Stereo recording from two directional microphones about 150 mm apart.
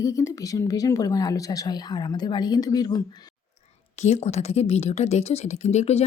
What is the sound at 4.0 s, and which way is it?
Speech, 50° left (ahead or behind).